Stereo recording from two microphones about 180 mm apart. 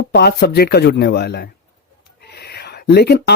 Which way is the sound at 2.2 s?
65° left (ahead or behind).